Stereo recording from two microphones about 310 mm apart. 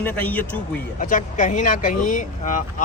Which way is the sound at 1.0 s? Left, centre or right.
Left.